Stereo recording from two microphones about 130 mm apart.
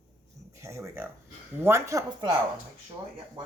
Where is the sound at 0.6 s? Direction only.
20° right (ahead or behind).